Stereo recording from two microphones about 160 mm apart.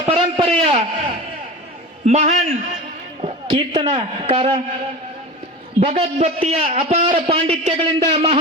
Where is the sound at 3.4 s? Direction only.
35° right (ahead or behind).